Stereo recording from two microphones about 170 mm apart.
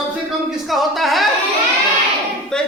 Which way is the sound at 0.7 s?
Centre (ahead or behind).